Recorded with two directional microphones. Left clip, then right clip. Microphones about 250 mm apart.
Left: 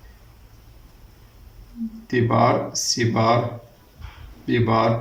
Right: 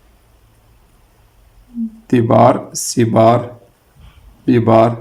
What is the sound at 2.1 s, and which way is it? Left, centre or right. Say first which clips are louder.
A man's voice: right 8 dB; right.